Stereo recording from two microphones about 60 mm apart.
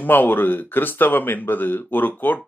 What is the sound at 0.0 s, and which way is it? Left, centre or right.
Speech, left.